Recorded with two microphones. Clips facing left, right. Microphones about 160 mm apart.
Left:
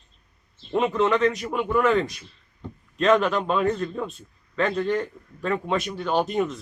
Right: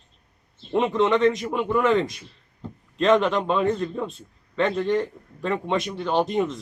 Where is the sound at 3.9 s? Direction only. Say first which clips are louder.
Right 1 dB; centre (ahead or behind).